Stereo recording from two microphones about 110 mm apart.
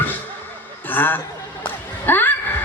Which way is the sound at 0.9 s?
20° left (ahead or behind).